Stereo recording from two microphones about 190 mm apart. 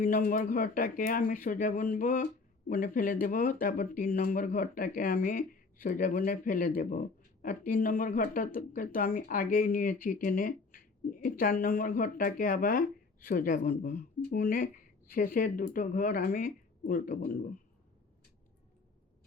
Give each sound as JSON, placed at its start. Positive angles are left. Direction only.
{"t": 0.0, "sound": "speech", "side_deg": 45}